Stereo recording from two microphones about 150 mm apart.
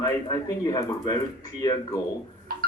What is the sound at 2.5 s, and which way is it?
Music, 75° right (ahead or behind).